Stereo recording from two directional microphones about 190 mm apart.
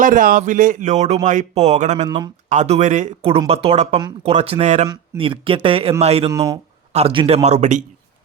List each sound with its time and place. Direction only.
0.0 s speech: 45° right (ahead or behind)
2.0 s a man's voice: 20° right (ahead or behind)
2.5 s a man's voice: 35° right (ahead or behind)
6.3 s a man's voice: 20° right (ahead or behind)
6.9 s speech: 30° right (ahead or behind)